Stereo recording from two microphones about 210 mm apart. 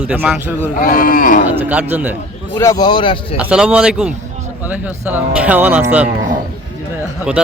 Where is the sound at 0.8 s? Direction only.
40° left (ahead or behind).